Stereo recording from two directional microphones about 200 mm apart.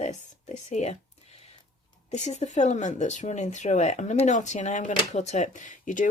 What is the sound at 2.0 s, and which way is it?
Speech, 35° left (ahead or behind).